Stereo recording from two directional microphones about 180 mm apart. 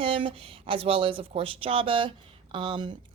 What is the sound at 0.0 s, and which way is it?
Speech, 30° right (ahead or behind).